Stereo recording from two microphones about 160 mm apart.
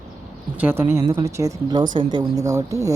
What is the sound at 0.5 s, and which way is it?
A woman's voice, 10° right (ahead or behind).